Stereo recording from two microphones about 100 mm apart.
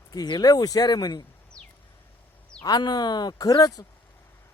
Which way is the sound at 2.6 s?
45° left (ahead or behind).